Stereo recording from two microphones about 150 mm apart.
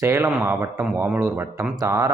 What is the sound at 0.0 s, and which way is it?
Speech, 15° right (ahead or behind).